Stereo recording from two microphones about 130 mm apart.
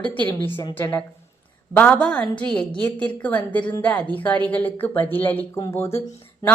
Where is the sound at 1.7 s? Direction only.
10° left (ahead or behind).